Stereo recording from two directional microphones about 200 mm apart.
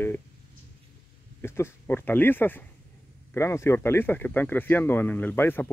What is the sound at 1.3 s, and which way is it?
Speech, 10° left (ahead or behind).